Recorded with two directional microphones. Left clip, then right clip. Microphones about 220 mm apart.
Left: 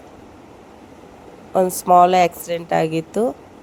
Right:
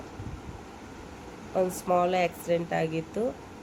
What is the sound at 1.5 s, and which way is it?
Speech, 25° left (ahead or behind).